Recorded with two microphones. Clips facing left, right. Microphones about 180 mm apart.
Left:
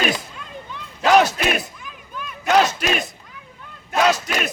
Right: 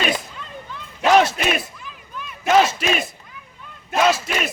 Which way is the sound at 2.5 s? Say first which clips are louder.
Right 1 dB; centre (ahead or behind).